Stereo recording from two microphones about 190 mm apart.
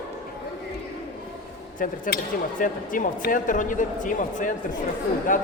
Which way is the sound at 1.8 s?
45° left (ahead or behind).